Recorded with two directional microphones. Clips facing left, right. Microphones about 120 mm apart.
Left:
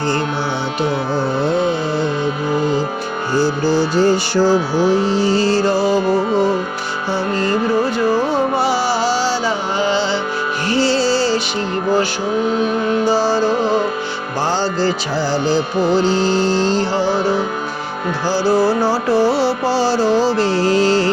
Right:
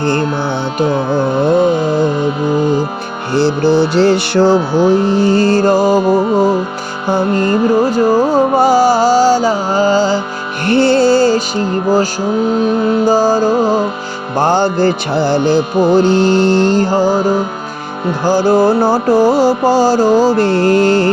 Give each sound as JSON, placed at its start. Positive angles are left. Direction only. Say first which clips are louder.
{"t": 1.5, "sound": "music", "louder": "right 6 dB", "side_deg": -45}
{"t": 3.3, "sound": "music", "louder": "right 5 dB", "side_deg": -65}
{"t": 4.8, "sound": "music", "louder": "right 4 dB", "side_deg": -55}
{"t": 7.1, "sound": "music", "louder": "right 6 dB", "side_deg": -50}
{"t": 10.7, "sound": "music", "louder": "right 7 dB", "side_deg": -55}
{"t": 13.1, "sound": "music", "louder": "right 5 dB", "side_deg": -45}